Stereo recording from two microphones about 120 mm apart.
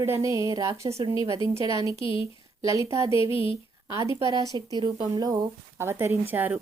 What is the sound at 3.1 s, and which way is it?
Speech, 50° left (ahead or behind).